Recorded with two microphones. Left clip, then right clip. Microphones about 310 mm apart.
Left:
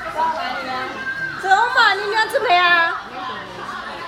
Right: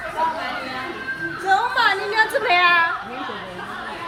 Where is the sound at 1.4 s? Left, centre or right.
Left.